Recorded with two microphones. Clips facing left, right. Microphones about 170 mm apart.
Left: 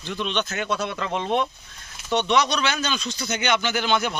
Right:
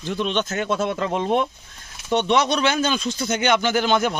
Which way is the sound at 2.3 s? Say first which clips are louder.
Right 3 dB; 50° right (ahead or behind).